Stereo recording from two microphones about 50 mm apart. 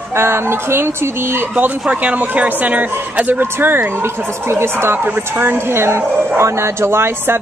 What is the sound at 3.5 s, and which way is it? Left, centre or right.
Speech, right.